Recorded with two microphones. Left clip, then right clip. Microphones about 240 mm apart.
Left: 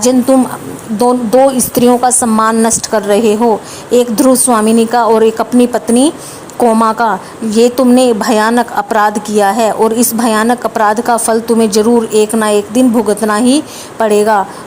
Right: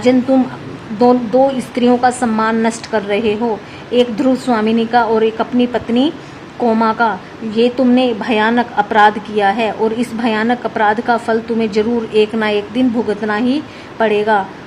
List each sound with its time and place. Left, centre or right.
0.9 s a woman's voice: left
2.0 s a woman's voice: centre
2.9 s a woman's voice: left